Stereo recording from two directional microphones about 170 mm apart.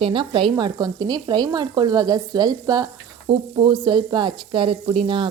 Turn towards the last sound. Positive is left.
turn(degrees=-30)  # may be behind; listen again after turning